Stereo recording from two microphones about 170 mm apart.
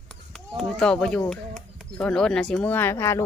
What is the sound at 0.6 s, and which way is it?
Speech, 5° left (ahead or behind).